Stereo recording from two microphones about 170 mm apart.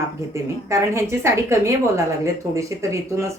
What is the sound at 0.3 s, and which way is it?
Speech, 15° right (ahead or behind).